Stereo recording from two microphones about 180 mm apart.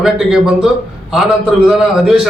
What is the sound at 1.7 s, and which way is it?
Speech, centre (ahead or behind).